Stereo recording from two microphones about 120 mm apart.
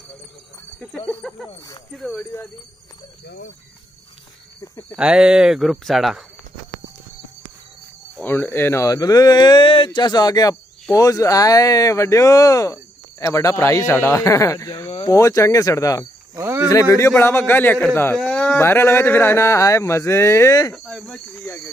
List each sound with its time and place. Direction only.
0.7 s a sound: 10° left (ahead or behind)
2.0 s speech: 5° left (ahead or behind)
4.9 s speech: 5° right (ahead or behind)
8.2 s speech: 15° left (ahead or behind)
16.3 s cricket: 20° right (ahead or behind)
16.6 s speech: 25° left (ahead or behind)
18.3 s a sound: 10° left (ahead or behind)
18.6 s speech: 20° left (ahead or behind)
20.7 s speech: centre (ahead or behind)